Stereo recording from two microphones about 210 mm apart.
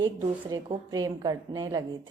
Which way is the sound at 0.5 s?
20° right (ahead or behind).